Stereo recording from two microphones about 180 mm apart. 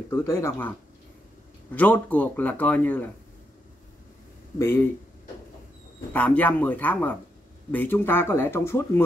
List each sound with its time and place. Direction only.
0.1 s speech: 15° left (ahead or behind)
4.6 s speech: 15° left (ahead or behind)
6.1 s speech: 10° left (ahead or behind)